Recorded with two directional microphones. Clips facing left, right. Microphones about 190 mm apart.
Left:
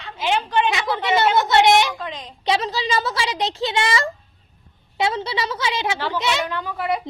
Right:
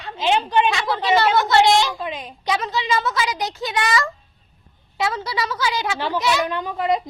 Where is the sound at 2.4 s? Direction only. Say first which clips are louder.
Left 1 dB; 30° left (ahead or behind).